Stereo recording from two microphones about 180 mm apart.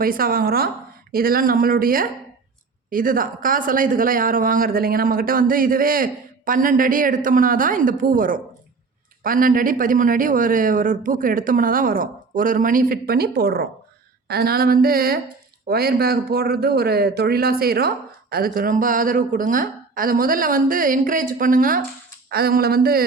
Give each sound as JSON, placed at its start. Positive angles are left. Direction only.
{"t": 0.0, "sound": "speech", "side_deg": -55}